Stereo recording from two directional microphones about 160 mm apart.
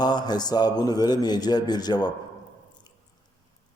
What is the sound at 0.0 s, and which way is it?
A man's voice, 25° left (ahead or behind).